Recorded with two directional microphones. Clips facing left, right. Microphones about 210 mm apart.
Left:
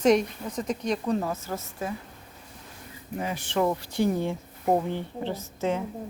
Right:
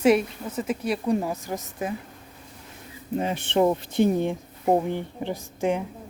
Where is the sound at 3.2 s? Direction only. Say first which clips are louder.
Right 4 dB; 25° right (ahead or behind).